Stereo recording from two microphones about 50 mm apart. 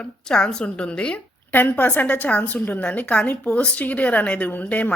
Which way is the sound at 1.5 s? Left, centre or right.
Left.